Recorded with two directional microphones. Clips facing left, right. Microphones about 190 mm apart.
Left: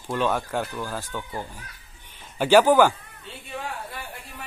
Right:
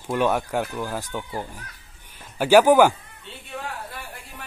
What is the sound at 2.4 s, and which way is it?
Speech, 10° right (ahead or behind).